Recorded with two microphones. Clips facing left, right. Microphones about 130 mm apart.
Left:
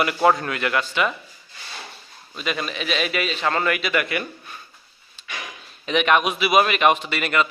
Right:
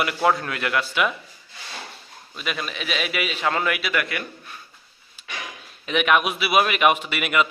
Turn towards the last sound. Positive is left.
turn(degrees=-10)  # may be behind; listen again after turning